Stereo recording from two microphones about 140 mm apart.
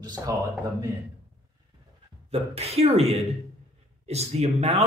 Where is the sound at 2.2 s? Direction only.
45° right (ahead or behind).